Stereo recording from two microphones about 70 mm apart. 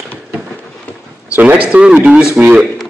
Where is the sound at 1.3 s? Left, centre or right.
Right.